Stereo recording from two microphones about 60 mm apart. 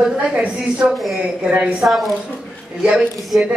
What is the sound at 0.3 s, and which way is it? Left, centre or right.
A man's voice, right.